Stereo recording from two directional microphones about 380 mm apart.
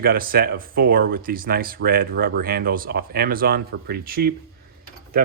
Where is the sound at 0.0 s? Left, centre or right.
Right.